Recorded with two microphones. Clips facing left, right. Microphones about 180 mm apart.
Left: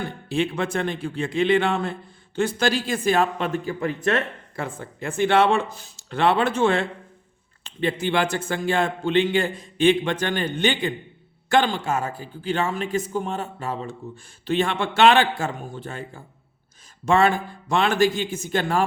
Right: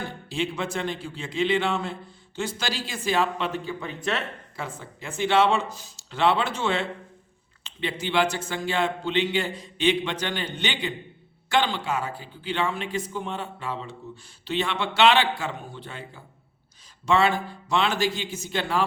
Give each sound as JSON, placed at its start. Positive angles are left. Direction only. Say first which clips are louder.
{"t": 0.3, "sound": "a man's voice", "louder": "left 5 dB", "side_deg": 55}